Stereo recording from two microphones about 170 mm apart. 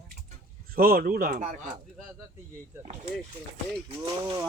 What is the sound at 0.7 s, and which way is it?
Speech, 60° right (ahead or behind).